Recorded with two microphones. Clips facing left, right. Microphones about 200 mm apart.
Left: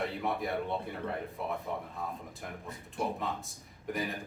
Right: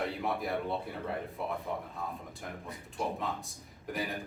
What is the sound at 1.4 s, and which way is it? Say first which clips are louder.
Speech: even; centre (ahead or behind).